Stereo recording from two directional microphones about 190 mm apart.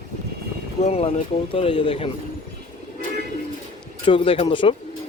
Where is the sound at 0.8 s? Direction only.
35° left (ahead or behind).